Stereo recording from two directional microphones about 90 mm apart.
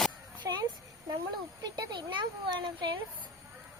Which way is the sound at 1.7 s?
55° right (ahead or behind).